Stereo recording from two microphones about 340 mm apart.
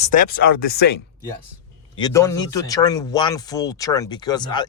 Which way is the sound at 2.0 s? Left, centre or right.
Centre.